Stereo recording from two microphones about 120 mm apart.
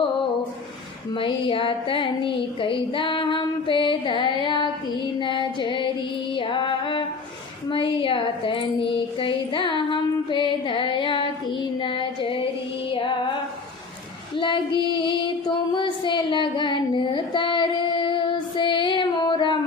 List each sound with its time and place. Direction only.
1.1 s a sound: 45° left (ahead or behind)
5.2 s female singing: 40° left (ahead or behind)
6.3 s music: 45° left (ahead or behind)
7.7 s a sound: 45° left (ahead or behind)
11.8 s child singing: 45° left (ahead or behind)
12.9 s female singing: 45° left (ahead or behind)
14.3 s child singing: 40° left (ahead or behind)
14.9 s music: 40° left (ahead or behind)